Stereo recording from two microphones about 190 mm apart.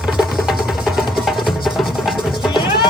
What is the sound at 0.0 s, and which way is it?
Music, 5° right (ahead or behind).